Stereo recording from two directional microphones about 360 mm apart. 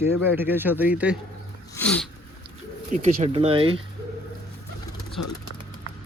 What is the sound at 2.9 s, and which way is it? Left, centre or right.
Speech, centre.